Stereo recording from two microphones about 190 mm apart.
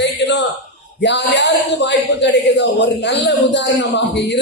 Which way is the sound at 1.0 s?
65° left (ahead or behind).